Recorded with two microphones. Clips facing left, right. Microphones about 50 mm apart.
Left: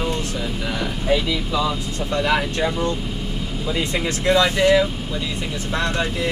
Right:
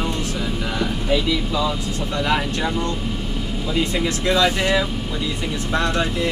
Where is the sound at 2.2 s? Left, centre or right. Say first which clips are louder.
Left 1 dB; centre.